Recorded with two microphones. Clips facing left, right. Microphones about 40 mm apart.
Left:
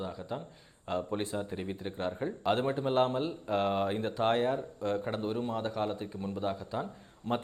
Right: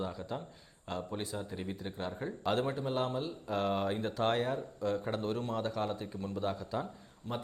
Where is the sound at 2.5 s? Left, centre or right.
Left.